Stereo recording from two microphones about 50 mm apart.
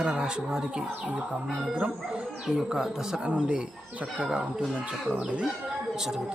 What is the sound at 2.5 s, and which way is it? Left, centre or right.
Speech, centre.